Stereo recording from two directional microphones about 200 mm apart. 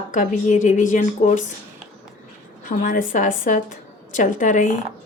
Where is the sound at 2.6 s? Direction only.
40° left (ahead or behind).